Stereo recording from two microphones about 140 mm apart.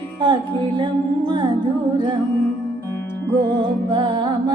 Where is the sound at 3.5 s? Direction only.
40° right (ahead or behind).